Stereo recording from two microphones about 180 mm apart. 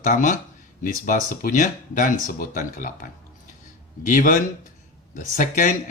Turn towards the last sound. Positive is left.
turn(degrees=45)  # may be behind; listen again after turning